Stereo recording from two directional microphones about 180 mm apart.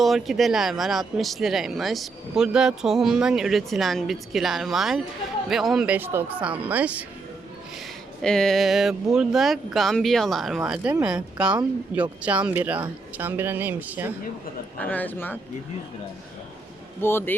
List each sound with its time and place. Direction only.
0.0 s a woman's voice: centre (ahead or behind)
8.2 s a woman's voice: 5° left (ahead or behind)
14.8 s speech: 10° left (ahead or behind)
17.0 s speech: 15° left (ahead or behind)